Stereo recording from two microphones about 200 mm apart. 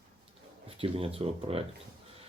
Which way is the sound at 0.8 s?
30° right (ahead or behind).